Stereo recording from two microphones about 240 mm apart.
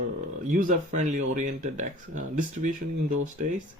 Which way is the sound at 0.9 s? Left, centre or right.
Right.